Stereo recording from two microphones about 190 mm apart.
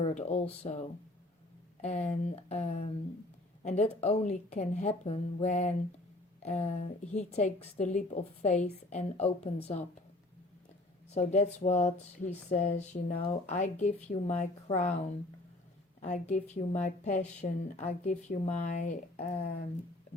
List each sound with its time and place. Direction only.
0.0 s a woman's voice: 35° left (ahead or behind)
11.1 s a woman's voice: 35° left (ahead or behind)
16.0 s a woman's voice: 40° left (ahead or behind)